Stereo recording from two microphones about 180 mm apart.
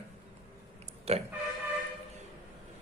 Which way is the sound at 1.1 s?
35° right (ahead or behind).